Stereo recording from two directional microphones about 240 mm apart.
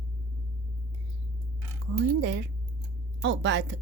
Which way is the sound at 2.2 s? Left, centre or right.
Right.